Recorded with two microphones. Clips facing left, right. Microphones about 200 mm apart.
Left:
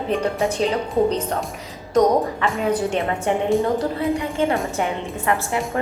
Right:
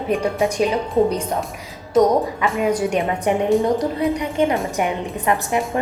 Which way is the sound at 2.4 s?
15° right (ahead or behind).